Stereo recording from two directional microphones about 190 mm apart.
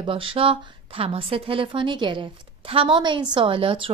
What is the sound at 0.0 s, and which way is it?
A woman's voice, 30° right (ahead or behind).